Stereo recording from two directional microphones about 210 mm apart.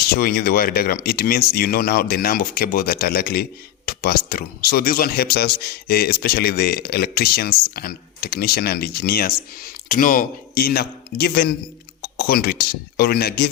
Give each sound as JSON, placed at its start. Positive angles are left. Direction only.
{"t": 0.1, "sound": "speech", "side_deg": 45}